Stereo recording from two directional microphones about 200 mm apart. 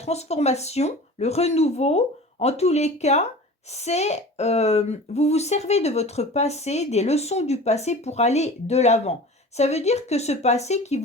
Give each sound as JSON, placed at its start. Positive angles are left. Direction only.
{"t": 0.0, "sound": "speech", "side_deg": 30}